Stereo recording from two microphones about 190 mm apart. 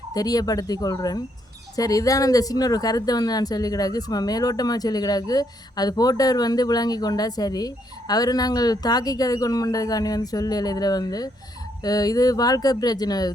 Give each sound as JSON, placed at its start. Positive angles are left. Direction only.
{"t": 0.1, "sound": "speech", "side_deg": 20}